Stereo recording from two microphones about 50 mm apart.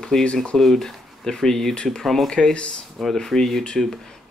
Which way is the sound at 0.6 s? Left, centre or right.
Centre.